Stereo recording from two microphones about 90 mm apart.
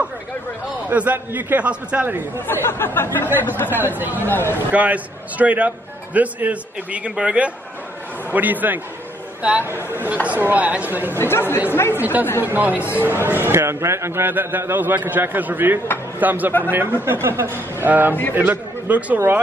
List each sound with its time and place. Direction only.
0.8 s a man's voice: 20° right (ahead or behind)
2.4 s speech: 25° left (ahead or behind)
3.7 s a man's voice: 20° right (ahead or behind)
4.3 s speech: 25° left (ahead or behind)
4.6 s a man's voice: 15° right (ahead or behind)
9.7 s a man's voice: 25° right (ahead or behind)
11.1 s speech: 25° left (ahead or behind)
12.0 s a man's voice: 20° right (ahead or behind)